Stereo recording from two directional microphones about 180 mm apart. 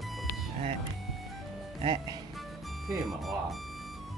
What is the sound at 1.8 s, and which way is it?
Speech, 25° right (ahead or behind).